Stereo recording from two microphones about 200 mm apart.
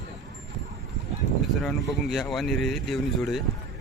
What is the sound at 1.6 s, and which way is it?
Speech, centre (ahead or behind).